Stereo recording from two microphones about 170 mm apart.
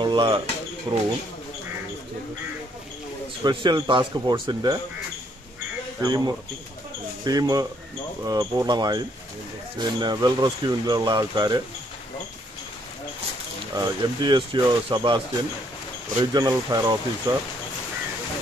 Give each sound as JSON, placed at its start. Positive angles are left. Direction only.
{"t": 0.0, "sound": "a sound", "side_deg": -30}
{"t": 0.9, "sound": "speech", "side_deg": -25}
{"t": 3.4, "sound": "speech", "side_deg": -25}
{"t": 5.9, "sound": "speech", "side_deg": -20}
{"t": 13.7, "sound": "speech", "side_deg": -25}